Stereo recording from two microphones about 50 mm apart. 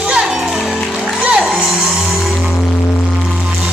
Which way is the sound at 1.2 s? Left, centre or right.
Centre.